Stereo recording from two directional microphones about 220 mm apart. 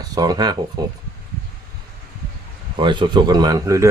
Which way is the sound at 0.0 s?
15° right (ahead or behind).